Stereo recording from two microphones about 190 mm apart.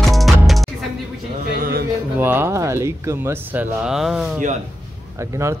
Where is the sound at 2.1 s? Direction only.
10° right (ahead or behind).